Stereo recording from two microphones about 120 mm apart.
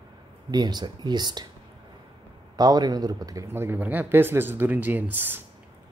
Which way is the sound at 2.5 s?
35° right (ahead or behind).